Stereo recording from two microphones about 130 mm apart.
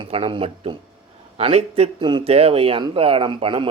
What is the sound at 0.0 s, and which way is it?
A man's voice, 45° right (ahead or behind).